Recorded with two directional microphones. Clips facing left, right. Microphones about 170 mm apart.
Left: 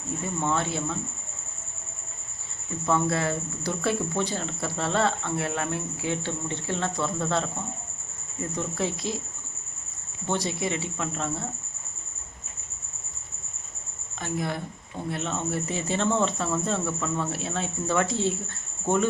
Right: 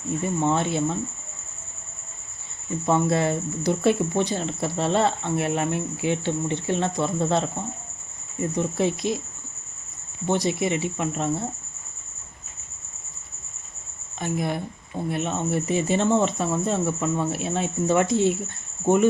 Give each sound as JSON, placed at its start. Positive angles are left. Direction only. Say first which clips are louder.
{"t": 0.4, "sound": "speech", "louder": "right 4 dB", "side_deg": -20}
{"t": 2.8, "sound": "speech", "louder": "right 4 dB", "side_deg": -20}
{"t": 8.5, "sound": "speech", "louder": "right 6 dB", "side_deg": -20}
{"t": 10.2, "sound": "speech", "louder": "right 5 dB", "side_deg": -15}
{"t": 14.2, "sound": "speech", "louder": "right 3 dB", "side_deg": -15}